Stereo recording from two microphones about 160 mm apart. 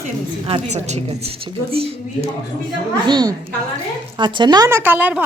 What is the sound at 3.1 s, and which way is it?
A woman's voice, 25° right (ahead or behind).